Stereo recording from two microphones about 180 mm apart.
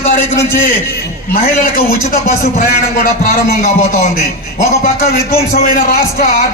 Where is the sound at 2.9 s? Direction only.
45° left (ahead or behind).